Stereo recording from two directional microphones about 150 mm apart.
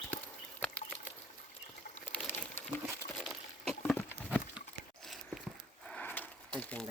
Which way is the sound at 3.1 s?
Centre (ahead or behind).